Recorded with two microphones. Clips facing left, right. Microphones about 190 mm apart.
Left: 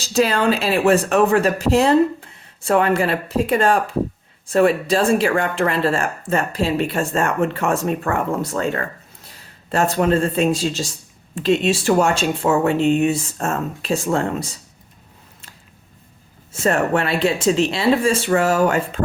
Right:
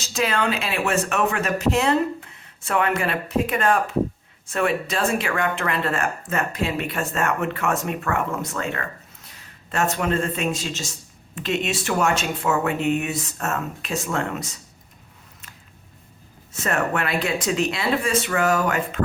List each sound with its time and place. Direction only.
0.0 s speech: 35° left (ahead or behind)
16.5 s speech: 30° left (ahead or behind)